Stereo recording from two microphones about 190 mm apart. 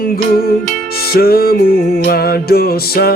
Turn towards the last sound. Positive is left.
turn(degrees=55)  # may be behind; listen again after turning